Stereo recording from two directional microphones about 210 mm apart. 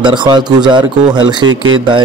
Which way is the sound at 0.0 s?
20° right (ahead or behind).